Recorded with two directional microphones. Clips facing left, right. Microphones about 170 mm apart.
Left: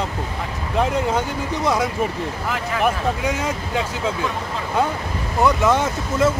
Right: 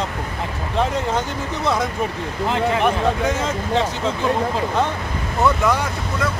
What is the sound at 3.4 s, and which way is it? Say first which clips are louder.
Speech: right 3 dB; 5° left (ahead or behind).